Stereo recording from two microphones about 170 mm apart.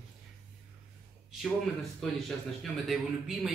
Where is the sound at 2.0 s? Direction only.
Centre (ahead or behind).